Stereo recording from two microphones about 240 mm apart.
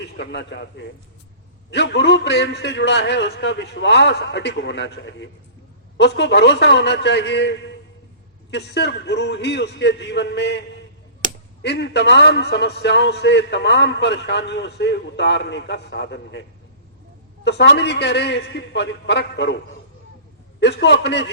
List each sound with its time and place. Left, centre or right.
0.0 s a man's voice: left
11.2 s finger snapping: right
11.6 s a man's voice: left
17.4 s a man's voice: left
20.6 s a man's voice: left